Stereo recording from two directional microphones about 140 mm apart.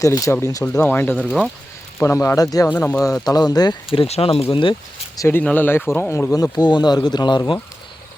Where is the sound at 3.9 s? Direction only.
45° left (ahead or behind).